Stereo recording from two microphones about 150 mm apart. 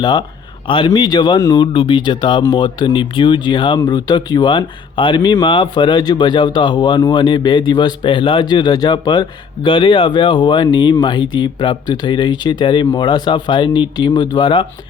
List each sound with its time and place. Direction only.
0.0 s speech: 30° left (ahead or behind)